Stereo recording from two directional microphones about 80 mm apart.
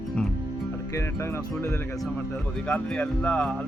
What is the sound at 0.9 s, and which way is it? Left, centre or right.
Speech, left.